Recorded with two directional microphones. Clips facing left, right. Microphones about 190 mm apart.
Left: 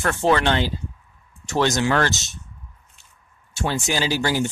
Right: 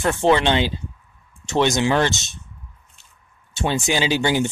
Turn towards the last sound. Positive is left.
turn(degrees=-20)  # may be behind; listen again after turning